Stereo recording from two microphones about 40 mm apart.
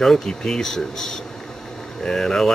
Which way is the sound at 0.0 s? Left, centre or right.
Centre.